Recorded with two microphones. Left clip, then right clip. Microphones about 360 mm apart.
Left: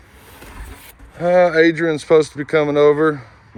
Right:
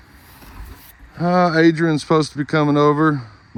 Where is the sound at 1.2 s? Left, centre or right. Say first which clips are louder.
Left 2 dB; centre.